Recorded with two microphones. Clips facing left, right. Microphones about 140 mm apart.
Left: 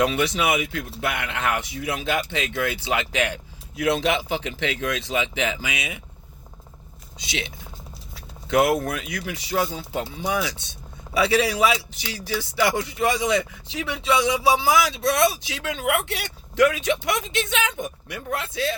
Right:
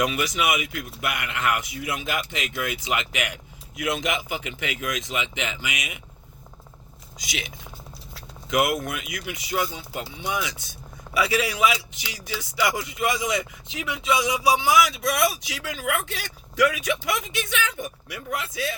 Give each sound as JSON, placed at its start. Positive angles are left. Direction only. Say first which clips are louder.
{"t": 0.0, "sound": "a man's voice", "louder": "left 3 dB", "side_deg": 30}
{"t": 7.2, "sound": "a man's voice", "louder": "left 3 dB", "side_deg": 25}